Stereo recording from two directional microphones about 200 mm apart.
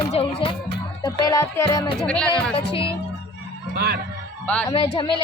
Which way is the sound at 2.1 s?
5° left (ahead or behind).